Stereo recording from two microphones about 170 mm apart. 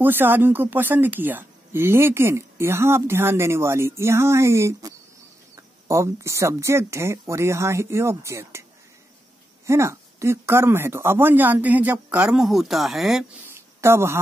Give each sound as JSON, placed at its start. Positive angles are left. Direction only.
{"t": 0.0, "sound": "speech", "side_deg": -10}
{"t": 9.7, "sound": "speech", "side_deg": -15}
{"t": 13.6, "sound": "a sound", "side_deg": -15}